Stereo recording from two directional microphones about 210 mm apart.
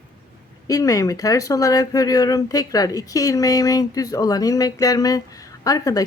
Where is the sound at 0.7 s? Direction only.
15° left (ahead or behind).